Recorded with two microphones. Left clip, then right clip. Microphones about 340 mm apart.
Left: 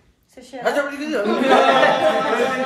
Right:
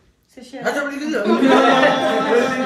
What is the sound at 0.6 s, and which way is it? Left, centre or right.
Speech, centre.